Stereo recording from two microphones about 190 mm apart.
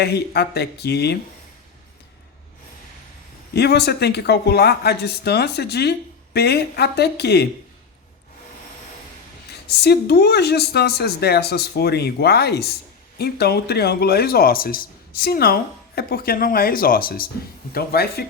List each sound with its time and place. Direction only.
0.0 s speech: 60° left (ahead or behind)
3.5 s speech: 60° left (ahead or behind)
9.6 s speech: 55° left (ahead or behind)